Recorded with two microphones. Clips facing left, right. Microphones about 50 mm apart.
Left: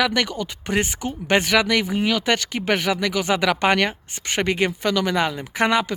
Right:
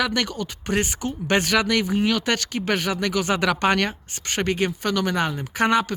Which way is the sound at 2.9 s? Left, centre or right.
Left.